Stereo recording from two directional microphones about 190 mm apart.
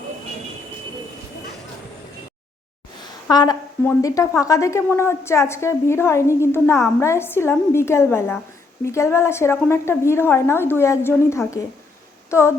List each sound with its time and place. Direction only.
3.2 s a woman's voice: 20° left (ahead or behind)